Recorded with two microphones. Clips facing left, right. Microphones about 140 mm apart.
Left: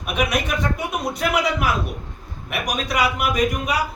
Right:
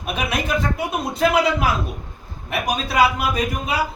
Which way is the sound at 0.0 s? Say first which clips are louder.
Left 2 dB; 30° right (ahead or behind).